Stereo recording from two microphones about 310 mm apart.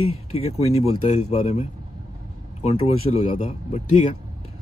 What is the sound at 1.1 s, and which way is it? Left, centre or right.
Speech, left.